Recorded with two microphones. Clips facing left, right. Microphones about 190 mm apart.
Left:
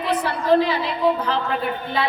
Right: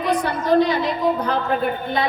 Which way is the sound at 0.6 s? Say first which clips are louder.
Right 2 dB; 45° right (ahead or behind).